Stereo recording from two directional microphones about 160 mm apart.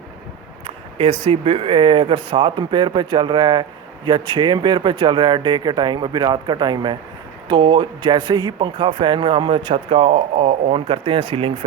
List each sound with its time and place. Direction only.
0.9 s speech: 40° right (ahead or behind)